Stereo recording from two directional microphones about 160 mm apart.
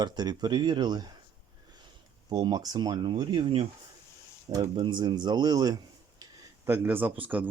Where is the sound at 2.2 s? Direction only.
25° right (ahead or behind).